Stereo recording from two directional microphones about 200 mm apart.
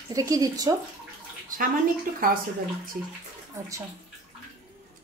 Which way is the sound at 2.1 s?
45° right (ahead or behind).